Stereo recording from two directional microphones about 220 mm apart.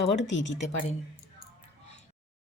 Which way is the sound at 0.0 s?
55° left (ahead or behind).